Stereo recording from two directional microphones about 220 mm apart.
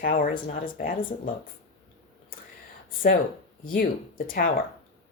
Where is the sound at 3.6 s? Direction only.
40° left (ahead or behind).